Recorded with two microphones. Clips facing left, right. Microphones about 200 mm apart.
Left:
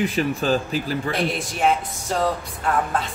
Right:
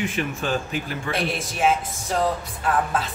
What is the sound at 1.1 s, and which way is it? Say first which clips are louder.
Speech: left 2 dB; centre (ahead or behind).